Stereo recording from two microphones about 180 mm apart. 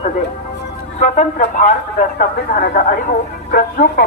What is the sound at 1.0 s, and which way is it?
Speech, 40° left (ahead or behind).